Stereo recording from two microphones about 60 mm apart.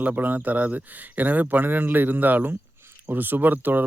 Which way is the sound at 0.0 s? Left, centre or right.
Right.